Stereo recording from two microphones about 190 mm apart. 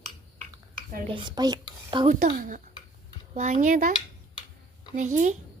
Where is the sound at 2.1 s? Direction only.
50° right (ahead or behind).